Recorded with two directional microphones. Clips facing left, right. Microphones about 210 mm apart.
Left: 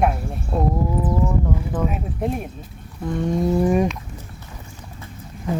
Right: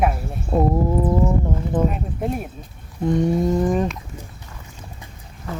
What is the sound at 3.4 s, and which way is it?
Speech, 10° left (ahead or behind).